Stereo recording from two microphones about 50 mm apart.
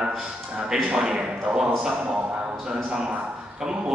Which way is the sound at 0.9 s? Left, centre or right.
Centre.